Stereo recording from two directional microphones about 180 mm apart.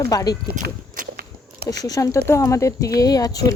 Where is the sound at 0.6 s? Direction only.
60° right (ahead or behind).